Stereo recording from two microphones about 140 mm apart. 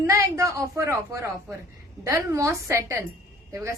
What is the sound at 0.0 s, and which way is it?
A man's voice, 20° right (ahead or behind).